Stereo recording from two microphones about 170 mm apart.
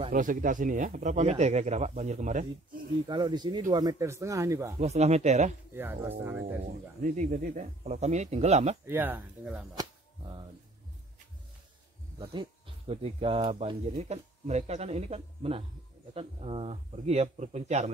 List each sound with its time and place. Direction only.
0.1 s speech: 50° right (ahead or behind)
3.1 s speech: 25° right (ahead or behind)
4.7 s speech: 40° right (ahead or behind)
6.0 s speech: 10° right (ahead or behind)
6.7 s speech: 50° right (ahead or behind)
8.8 s speech: 10° right (ahead or behind)
9.8 s a sound: 25° right (ahead or behind)
12.2 s speech: 30° right (ahead or behind)